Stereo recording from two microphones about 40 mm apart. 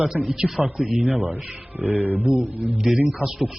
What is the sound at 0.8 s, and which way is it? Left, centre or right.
Speech, right.